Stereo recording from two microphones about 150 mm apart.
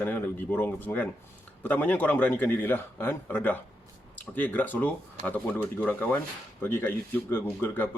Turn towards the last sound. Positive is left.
turn(degrees=15)  # may be behind; listen again after turning